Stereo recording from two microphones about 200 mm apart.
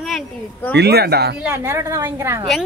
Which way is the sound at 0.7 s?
55° right (ahead or behind).